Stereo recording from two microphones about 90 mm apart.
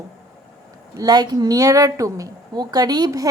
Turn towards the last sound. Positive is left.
turn(degrees=-45)  # may be behind; listen again after turning